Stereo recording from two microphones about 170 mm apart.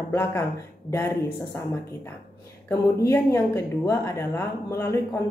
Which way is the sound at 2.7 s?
15° left (ahead or behind).